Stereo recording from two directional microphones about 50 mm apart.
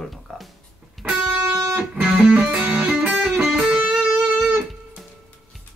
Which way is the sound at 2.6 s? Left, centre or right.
Right.